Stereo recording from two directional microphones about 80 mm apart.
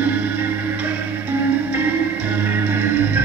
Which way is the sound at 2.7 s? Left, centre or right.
Right.